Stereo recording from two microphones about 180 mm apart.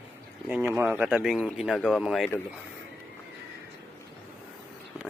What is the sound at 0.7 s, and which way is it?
Speech, 10° right (ahead or behind).